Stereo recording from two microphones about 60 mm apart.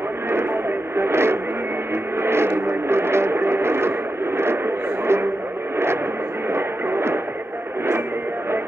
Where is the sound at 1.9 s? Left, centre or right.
Right.